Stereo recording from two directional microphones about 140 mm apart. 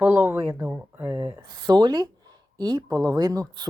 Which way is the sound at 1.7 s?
30° right (ahead or behind).